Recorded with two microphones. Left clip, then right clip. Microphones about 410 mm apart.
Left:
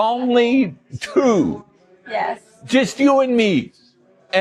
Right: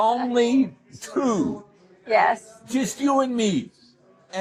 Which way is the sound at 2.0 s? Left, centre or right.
Right.